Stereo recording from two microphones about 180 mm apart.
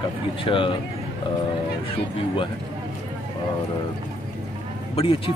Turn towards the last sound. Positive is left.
turn(degrees=30)  # may be behind; listen again after turning